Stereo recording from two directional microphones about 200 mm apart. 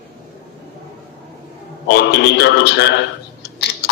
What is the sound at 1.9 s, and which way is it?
A man's voice, 60° left (ahead or behind).